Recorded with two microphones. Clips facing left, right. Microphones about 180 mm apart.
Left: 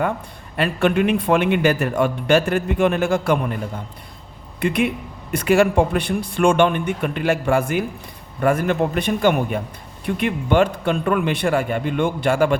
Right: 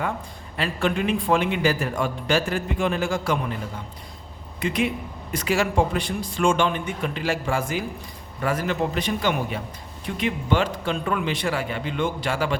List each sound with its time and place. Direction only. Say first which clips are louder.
0.5 s a man's voice: left 6 dB; 60° left (ahead or behind)
4.6 s a man's voice: left 4 dB; 60° left (ahead or behind)